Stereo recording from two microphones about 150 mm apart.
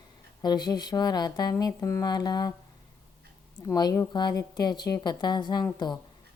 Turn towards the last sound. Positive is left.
turn(degrees=30)  # may be behind; listen again after turning